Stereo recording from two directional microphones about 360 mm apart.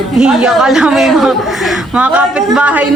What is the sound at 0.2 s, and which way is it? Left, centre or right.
A woman's voice, centre.